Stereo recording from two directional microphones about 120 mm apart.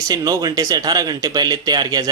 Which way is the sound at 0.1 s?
30° right (ahead or behind).